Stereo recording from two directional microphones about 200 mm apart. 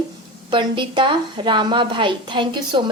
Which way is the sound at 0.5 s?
25° right (ahead or behind).